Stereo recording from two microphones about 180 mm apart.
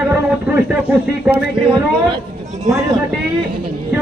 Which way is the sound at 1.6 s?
25° right (ahead or behind).